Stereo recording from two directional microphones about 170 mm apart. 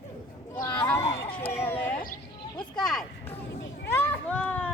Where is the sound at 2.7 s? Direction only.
5° left (ahead or behind).